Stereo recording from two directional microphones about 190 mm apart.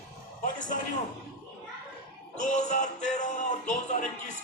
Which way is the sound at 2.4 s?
40° left (ahead or behind).